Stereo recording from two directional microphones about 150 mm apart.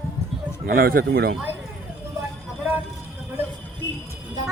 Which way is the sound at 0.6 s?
70° right (ahead or behind).